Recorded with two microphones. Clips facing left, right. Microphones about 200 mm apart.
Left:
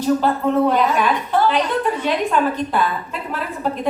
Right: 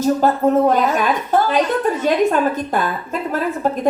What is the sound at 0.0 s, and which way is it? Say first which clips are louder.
A woman's voice: right 2 dB; 45° right (ahead or behind).